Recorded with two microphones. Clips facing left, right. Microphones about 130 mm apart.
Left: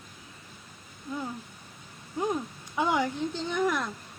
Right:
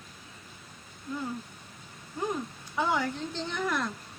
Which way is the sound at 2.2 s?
15° left (ahead or behind).